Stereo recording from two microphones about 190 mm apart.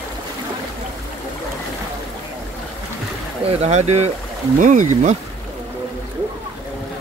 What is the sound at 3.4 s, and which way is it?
Speech, 35° right (ahead or behind).